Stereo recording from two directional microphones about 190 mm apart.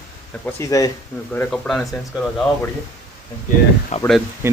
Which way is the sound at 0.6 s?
15° left (ahead or behind).